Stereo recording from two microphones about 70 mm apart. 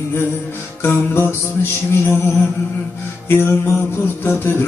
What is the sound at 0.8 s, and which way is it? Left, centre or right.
Mantra, left.